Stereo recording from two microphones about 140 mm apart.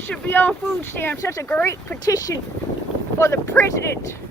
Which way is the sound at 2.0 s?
25° left (ahead or behind).